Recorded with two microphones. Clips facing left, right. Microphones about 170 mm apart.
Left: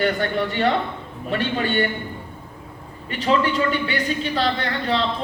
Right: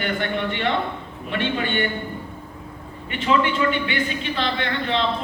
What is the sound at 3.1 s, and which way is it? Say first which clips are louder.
A woman's voice: left 1 dB; 40° left (ahead or behind).